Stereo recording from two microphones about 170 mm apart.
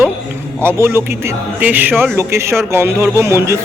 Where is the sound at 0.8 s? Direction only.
15° right (ahead or behind).